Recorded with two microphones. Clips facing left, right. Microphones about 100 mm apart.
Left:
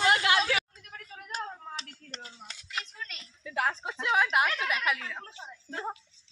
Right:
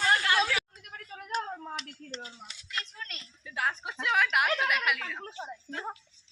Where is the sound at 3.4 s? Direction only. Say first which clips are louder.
Left 2 dB; 40° left (ahead or behind).